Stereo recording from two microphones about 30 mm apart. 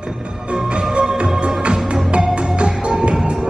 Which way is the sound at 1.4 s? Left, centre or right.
Right.